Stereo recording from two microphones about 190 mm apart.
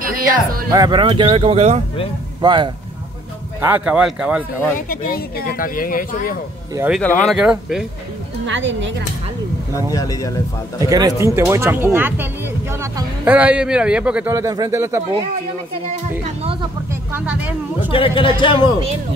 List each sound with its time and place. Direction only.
0.0 s music: 50° right (ahead or behind)
0.7 s speech: 20° right (ahead or behind)
3.6 s a man's voice: 10° right (ahead or behind)
4.7 s speech: 50° left (ahead or behind)
7.0 s speech: 5° left (ahead or behind)
8.5 s a woman's voice: 75° right (ahead or behind)
9.9 s speech: 20° left (ahead or behind)
10.8 s a man's voice: 20° right (ahead or behind)
14.3 s speech: 20° right (ahead or behind)
17.1 s speech: 5° right (ahead or behind)
17.9 s speech: 25° left (ahead or behind)